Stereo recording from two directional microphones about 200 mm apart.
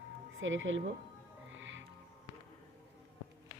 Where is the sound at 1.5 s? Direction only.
70° right (ahead or behind).